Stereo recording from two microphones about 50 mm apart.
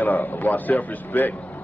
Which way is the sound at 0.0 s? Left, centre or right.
Left.